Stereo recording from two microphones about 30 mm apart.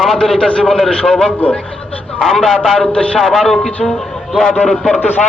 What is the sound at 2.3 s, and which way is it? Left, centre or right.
A man's voice, centre.